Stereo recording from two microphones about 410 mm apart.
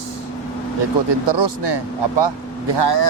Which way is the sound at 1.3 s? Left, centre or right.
Right.